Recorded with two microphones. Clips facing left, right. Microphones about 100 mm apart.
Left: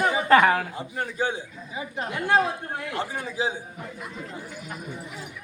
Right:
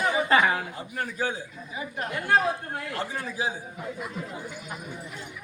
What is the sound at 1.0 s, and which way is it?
A man's voice, 25° left (ahead or behind).